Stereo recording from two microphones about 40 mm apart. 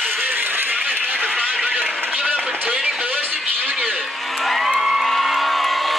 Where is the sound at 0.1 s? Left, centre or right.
Right.